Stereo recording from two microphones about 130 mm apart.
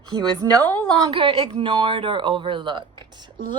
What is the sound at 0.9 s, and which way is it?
Speech, 30° right (ahead or behind).